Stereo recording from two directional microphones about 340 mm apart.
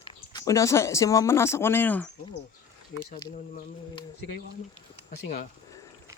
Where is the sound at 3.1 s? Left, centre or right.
Centre.